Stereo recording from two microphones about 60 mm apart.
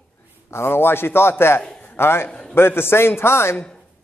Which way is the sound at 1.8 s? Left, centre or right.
Left.